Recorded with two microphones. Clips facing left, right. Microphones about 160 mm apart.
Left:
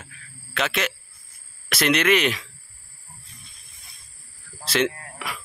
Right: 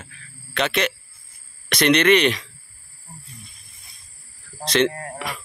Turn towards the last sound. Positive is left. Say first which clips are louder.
# right 4 dB
turn(degrees=5)  # may be behind; listen again after turning